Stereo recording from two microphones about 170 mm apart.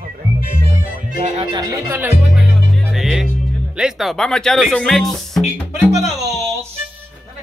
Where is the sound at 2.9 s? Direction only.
Centre (ahead or behind).